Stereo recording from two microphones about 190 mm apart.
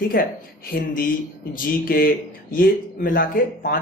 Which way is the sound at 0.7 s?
50° left (ahead or behind).